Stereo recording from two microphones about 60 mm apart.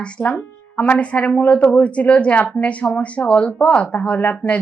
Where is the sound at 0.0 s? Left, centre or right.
Centre.